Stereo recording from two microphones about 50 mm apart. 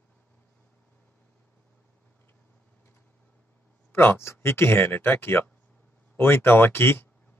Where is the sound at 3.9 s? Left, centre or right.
Left.